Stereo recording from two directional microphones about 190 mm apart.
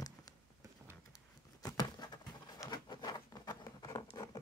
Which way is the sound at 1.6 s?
20° left (ahead or behind).